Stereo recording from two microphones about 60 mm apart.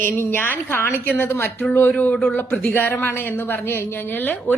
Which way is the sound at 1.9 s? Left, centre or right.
Left.